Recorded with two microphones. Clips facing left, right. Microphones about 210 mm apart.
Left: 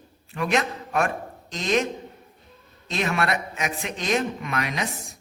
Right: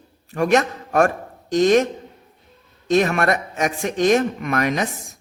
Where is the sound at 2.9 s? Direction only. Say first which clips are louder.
Right 7 dB; 45° right (ahead or behind).